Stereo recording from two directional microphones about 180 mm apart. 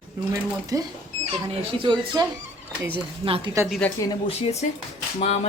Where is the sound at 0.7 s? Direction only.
20° right (ahead or behind).